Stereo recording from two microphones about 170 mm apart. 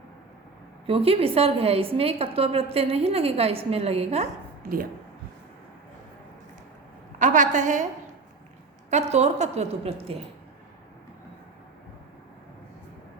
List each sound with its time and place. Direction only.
0.9 s a woman's voice: 35° right (ahead or behind)
7.2 s a woman's voice: 45° right (ahead or behind)
8.9 s a woman's voice: 40° right (ahead or behind)